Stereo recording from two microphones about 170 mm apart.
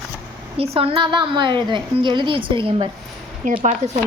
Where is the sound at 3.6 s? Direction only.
45° right (ahead or behind).